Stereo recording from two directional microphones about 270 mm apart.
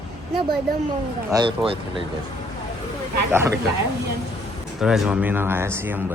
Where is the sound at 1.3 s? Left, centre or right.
Centre.